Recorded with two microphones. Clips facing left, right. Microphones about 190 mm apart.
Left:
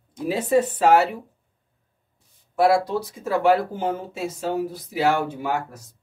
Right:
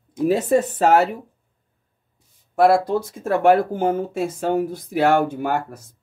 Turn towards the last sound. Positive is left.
turn(degrees=-55)  # may be behind; listen again after turning